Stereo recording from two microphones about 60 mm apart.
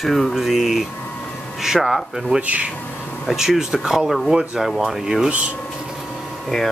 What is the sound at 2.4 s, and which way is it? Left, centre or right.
Speech, right.